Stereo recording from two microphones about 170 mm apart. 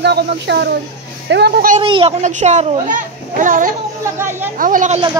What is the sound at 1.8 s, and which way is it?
Speech, 30° right (ahead or behind).